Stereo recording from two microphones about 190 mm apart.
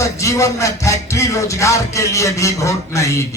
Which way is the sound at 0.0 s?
15° left (ahead or behind).